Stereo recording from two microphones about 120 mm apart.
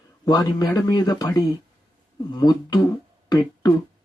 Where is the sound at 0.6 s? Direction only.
30° left (ahead or behind).